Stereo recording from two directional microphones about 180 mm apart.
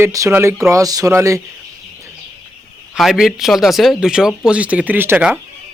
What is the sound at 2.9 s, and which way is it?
A man's voice, centre (ahead or behind).